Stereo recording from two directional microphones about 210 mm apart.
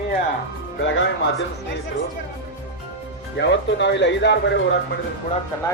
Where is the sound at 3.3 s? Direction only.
55° left (ahead or behind).